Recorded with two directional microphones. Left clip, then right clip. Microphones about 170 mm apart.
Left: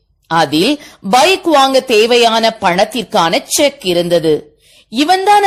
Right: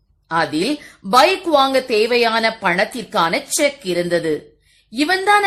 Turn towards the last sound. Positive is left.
turn(degrees=30)  # may be behind; listen again after turning